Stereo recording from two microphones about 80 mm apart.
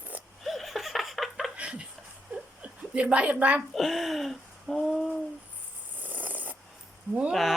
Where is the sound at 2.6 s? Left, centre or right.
Centre.